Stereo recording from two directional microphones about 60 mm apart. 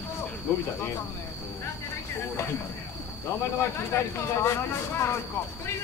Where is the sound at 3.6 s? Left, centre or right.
Left.